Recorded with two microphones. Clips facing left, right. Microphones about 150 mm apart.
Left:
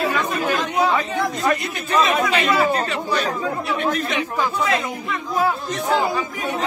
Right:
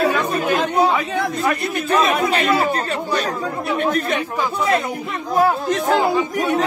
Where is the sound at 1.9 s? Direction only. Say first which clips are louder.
Right 1 dB; 60° right (ahead or behind).